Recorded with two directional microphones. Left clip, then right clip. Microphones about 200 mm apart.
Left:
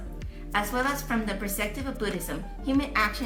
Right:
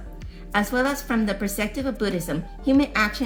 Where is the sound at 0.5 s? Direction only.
50° right (ahead or behind).